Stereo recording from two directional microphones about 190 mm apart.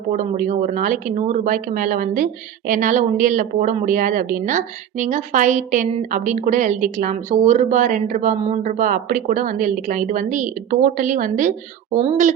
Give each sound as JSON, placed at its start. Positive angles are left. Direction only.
{"t": 0.2, "sound": "a woman's voice", "side_deg": -45}